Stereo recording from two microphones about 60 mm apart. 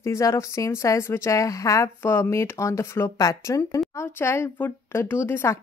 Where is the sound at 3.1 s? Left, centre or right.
Left.